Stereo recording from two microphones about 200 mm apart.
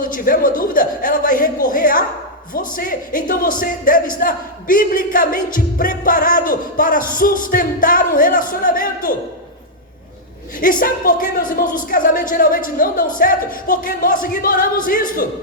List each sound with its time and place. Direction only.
0.0 s speech: 45° left (ahead or behind)
10.6 s speech: 45° left (ahead or behind)